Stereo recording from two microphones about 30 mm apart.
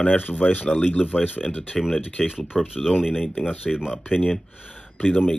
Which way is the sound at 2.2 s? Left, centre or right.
Centre.